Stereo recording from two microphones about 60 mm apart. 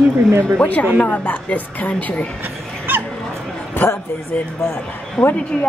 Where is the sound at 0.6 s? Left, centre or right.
Left.